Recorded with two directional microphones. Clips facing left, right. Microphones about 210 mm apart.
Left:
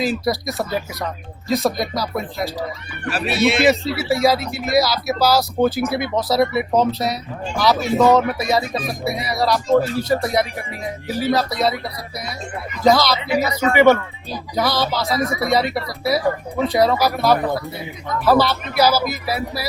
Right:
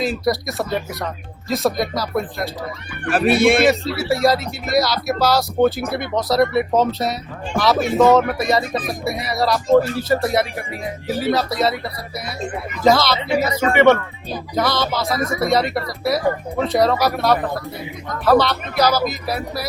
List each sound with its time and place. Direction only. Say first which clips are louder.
0.0 s speech: even; centre (ahead or behind)
3.1 s speech: right 4 dB; 50° right (ahead or behind)
3.7 s speech: left 1 dB; centre (ahead or behind)
12.8 s speech: even; centre (ahead or behind)
13.3 s speech: right 1 dB; 30° right (ahead or behind)
13.7 s speech: even; centre (ahead or behind)